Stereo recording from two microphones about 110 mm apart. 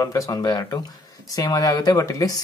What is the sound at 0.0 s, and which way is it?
Speech, 30° left (ahead or behind).